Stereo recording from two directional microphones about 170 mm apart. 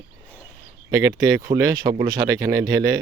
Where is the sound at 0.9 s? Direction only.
20° right (ahead or behind).